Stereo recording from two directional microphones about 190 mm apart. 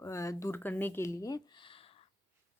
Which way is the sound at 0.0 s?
15° left (ahead or behind).